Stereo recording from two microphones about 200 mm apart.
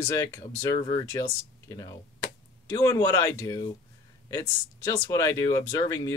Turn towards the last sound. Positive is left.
turn(degrees=15)  # may be behind; listen again after turning